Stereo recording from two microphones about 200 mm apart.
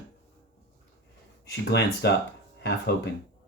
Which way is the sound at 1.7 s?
55° left (ahead or behind).